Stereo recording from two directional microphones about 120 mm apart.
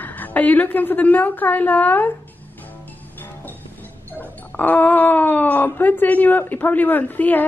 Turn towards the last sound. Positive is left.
turn(degrees=15)  # may be behind; listen again after turning